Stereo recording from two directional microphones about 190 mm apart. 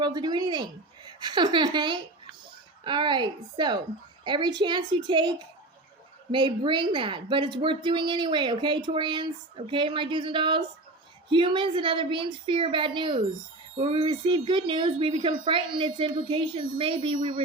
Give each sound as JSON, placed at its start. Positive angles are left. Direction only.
{"t": 0.0, "sound": "a woman's voice", "side_deg": -20}
{"t": 6.3, "sound": "a woman's voice", "side_deg": -25}